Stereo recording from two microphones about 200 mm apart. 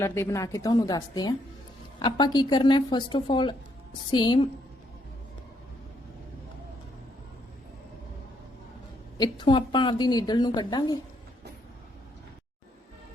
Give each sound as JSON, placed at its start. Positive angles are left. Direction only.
{"t": 0.0, "sound": "a woman's voice", "side_deg": 15}
{"t": 9.1, "sound": "speech", "side_deg": 25}